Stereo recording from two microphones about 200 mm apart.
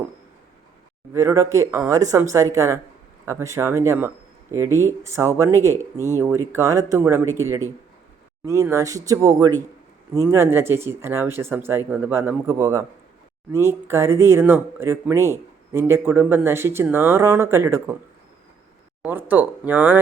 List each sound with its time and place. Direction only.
1.1 s speech: 15° right (ahead or behind)
19.0 s speech: 10° right (ahead or behind)